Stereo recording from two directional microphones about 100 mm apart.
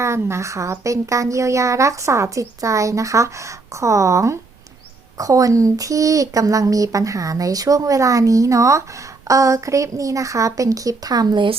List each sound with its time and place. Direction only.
0.0 s speech: 25° right (ahead or behind)